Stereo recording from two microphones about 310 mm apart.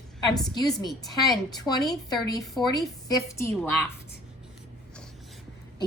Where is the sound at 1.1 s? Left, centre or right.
Centre.